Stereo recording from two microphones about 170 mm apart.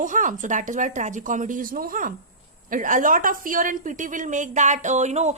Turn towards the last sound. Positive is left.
turn(degrees=-40)  # may be behind; listen again after turning